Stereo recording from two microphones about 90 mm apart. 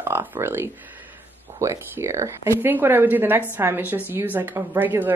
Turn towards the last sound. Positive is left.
turn(degrees=-20)  # may be behind; listen again after turning